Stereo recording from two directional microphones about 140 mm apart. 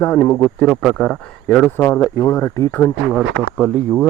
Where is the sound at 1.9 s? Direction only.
25° left (ahead or behind).